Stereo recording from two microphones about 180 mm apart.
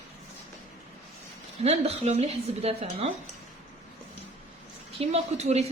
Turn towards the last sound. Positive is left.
turn(degrees=-35)  # may be behind; listen again after turning